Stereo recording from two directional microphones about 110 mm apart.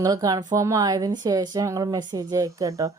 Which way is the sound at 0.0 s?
35° right (ahead or behind).